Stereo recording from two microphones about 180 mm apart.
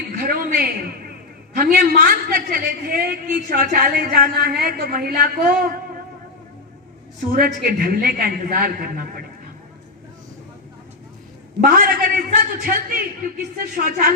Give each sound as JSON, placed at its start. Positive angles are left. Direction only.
{"t": 0.2, "sound": "a sound", "side_deg": -55}
{"t": 1.5, "sound": "a woman's voice", "side_deg": -55}
{"t": 7.3, "sound": "a man's voice", "side_deg": -55}
{"t": 11.6, "sound": "a man's voice", "side_deg": -55}